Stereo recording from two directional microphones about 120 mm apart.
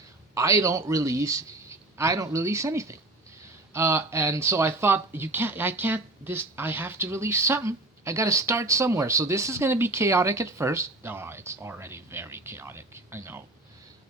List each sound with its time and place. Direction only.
0.3 s speech: 25° right (ahead or behind)